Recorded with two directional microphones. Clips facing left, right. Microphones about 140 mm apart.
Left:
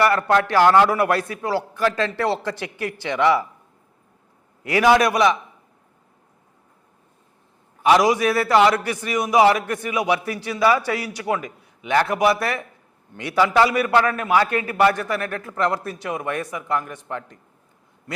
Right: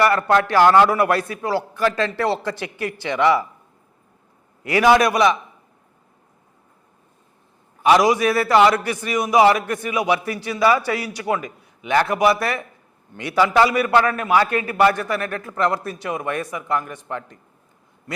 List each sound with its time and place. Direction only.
0.0 s a man's voice: 20° right (ahead or behind)
4.6 s a man's voice: 15° right (ahead or behind)
7.8 s a man's voice: 15° right (ahead or behind)